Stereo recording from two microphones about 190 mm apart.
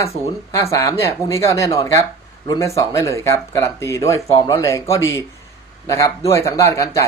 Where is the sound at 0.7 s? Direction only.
15° left (ahead or behind).